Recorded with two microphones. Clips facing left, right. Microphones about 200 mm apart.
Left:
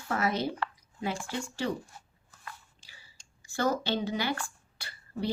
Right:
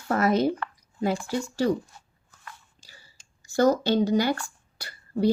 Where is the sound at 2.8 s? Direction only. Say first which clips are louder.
Right 5 dB; 40° right (ahead or behind).